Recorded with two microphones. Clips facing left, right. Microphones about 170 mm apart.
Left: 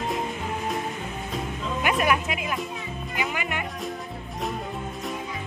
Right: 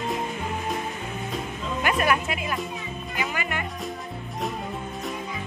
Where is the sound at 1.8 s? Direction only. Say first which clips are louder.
Even; 5° left (ahead or behind).